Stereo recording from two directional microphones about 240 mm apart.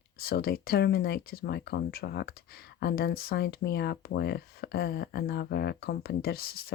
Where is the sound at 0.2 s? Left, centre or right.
Left.